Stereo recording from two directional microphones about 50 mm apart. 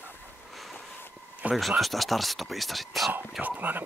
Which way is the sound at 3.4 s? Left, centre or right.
Centre.